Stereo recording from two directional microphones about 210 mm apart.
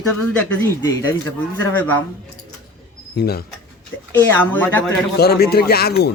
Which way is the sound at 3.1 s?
50° left (ahead or behind).